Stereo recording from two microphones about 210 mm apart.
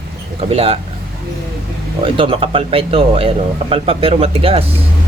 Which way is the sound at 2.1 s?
25° right (ahead or behind).